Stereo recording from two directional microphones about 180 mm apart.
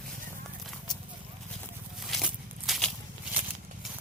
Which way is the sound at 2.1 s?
Centre (ahead or behind).